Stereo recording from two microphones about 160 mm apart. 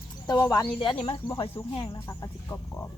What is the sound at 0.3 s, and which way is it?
Speech, 20° left (ahead or behind).